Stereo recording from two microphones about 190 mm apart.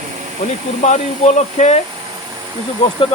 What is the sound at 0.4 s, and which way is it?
Speech, 35° left (ahead or behind).